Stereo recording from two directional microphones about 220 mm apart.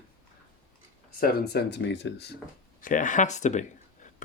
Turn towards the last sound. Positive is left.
turn(degrees=30)  # may be behind; listen again after turning